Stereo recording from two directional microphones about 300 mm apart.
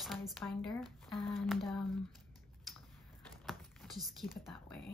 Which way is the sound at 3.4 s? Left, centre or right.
Centre.